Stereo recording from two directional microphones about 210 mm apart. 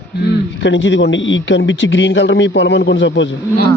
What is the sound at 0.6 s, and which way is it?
A man's voice, 60° left (ahead or behind).